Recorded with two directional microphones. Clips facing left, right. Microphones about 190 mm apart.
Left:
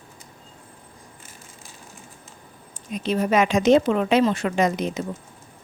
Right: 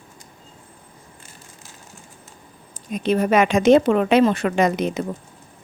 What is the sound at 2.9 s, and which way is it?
A woman's voice, 55° right (ahead or behind).